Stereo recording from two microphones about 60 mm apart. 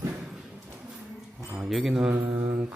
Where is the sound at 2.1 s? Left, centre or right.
Right.